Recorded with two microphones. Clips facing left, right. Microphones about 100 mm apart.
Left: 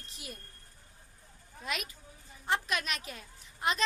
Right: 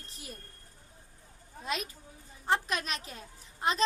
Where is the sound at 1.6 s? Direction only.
30° right (ahead or behind).